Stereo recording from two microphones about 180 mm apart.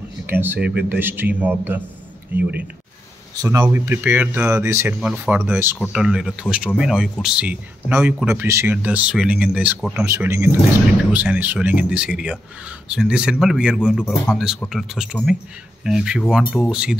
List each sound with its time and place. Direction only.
0.3 s speech: 10° right (ahead or behind)
3.6 s speech: 10° right (ahead or behind)